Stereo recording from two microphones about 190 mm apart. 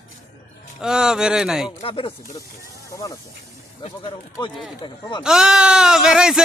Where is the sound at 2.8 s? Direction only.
15° left (ahead or behind).